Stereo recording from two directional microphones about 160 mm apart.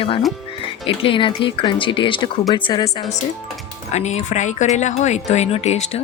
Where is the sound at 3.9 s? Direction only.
45° left (ahead or behind).